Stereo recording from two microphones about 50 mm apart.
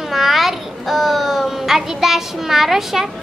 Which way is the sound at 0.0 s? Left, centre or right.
Centre.